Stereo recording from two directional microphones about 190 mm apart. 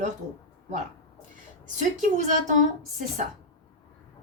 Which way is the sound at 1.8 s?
40° right (ahead or behind).